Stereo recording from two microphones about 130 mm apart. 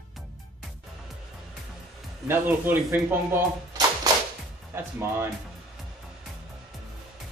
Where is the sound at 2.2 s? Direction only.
15° right (ahead or behind).